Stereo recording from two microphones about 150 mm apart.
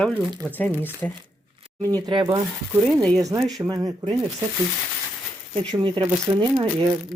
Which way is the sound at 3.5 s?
25° right (ahead or behind).